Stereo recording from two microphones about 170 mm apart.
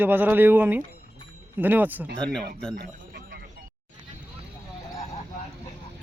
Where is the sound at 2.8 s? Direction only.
65° right (ahead or behind).